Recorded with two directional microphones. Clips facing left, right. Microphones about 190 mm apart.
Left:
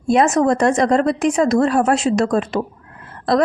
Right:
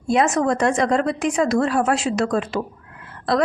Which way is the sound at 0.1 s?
40° left (ahead or behind).